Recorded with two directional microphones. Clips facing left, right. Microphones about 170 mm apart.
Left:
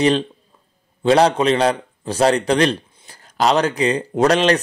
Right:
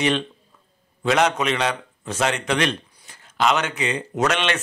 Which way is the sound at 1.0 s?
30° left (ahead or behind).